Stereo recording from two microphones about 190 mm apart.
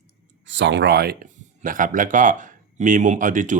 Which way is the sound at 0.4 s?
70° right (ahead or behind).